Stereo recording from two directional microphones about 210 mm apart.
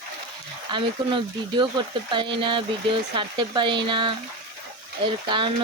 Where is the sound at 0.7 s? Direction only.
20° right (ahead or behind).